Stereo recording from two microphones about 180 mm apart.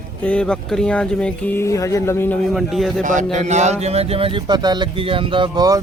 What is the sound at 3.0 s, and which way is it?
Speech, 45° right (ahead or behind).